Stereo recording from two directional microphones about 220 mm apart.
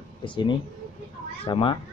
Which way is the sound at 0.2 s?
20° left (ahead or behind).